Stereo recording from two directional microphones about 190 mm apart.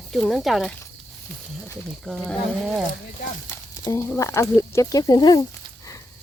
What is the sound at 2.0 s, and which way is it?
Speech, 5° left (ahead or behind).